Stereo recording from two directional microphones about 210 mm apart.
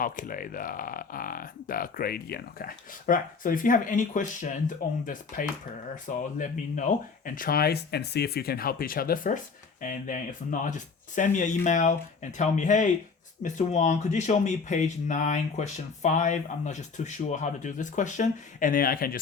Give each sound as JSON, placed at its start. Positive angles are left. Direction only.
{"t": 0.0, "sound": "speech", "side_deg": 40}